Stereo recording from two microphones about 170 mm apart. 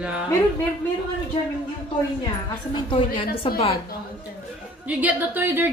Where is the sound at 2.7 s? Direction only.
30° left (ahead or behind).